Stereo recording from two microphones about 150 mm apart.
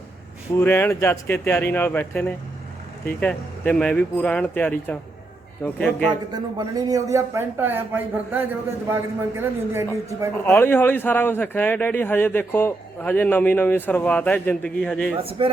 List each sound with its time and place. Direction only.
0.5 s a man's voice: 15° left (ahead or behind)
6.3 s a man's voice: 25° right (ahead or behind)
10.4 s a man's voice: 15° left (ahead or behind)
15.2 s speech: 40° right (ahead or behind)